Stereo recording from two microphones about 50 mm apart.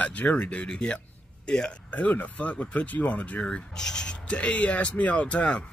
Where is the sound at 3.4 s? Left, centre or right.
Centre.